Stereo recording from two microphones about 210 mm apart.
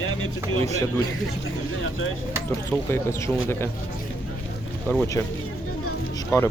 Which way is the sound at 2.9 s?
10° left (ahead or behind).